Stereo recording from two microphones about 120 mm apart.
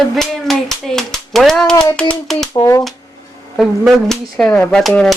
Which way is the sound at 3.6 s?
Centre (ahead or behind).